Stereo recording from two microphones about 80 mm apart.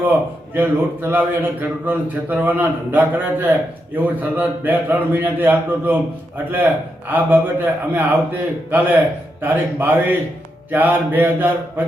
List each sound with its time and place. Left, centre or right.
0.0 s a man's voice: right